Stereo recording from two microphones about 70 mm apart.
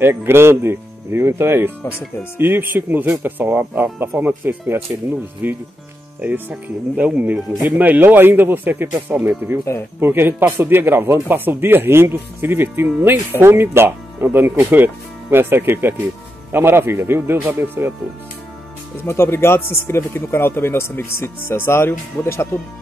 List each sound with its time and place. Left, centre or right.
0.0 s speech: right
19.0 s speech: left